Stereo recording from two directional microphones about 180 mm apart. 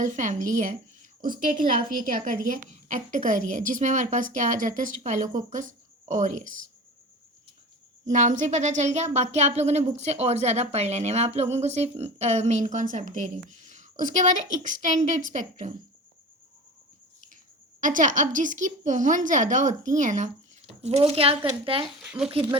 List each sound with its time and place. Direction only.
0.0 s a woman's voice: 45° right (ahead or behind)
8.1 s a woman's voice: 45° right (ahead or behind)
17.7 s a woman's voice: 45° right (ahead or behind); by 21.8 s 30° right (ahead or behind)
21.8 s speech: 5° right (ahead or behind)